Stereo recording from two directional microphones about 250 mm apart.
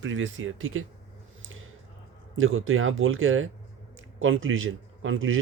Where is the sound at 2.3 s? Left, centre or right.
Right.